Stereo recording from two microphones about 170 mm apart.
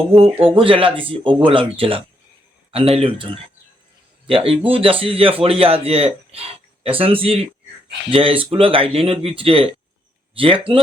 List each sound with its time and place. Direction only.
0.1 s speech: 35° right (ahead or behind)
4.3 s speech: 35° right (ahead or behind)